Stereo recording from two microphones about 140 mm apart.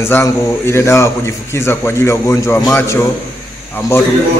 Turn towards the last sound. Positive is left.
turn(degrees=20)  # may be behind; listen again after turning